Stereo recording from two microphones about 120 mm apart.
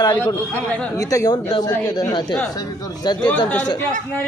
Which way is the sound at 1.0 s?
25° left (ahead or behind).